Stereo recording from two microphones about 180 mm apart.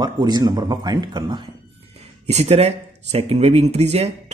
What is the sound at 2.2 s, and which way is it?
Speech, 35° right (ahead or behind).